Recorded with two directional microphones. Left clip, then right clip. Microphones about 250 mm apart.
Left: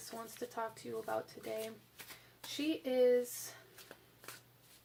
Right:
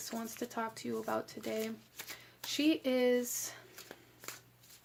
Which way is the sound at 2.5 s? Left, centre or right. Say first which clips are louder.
Right 3 dB; right.